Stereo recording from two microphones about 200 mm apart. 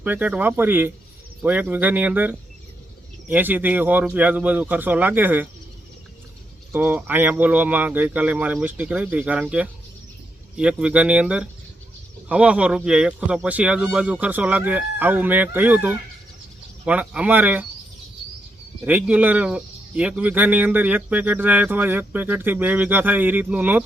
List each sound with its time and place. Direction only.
0.0 s speech: 10° right (ahead or behind)
6.7 s speech: 10° right (ahead or behind)
18.9 s speech: 10° right (ahead or behind)